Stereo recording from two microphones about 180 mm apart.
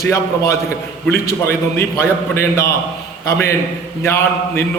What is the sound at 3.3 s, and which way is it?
A man's voice, 15° left (ahead or behind).